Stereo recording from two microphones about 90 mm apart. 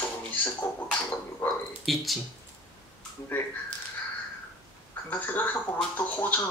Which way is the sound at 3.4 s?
20° left (ahead or behind).